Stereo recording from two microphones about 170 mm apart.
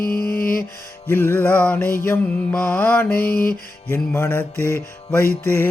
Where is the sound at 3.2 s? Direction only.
60° left (ahead or behind).